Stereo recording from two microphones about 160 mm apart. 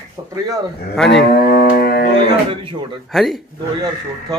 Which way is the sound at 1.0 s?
85° left.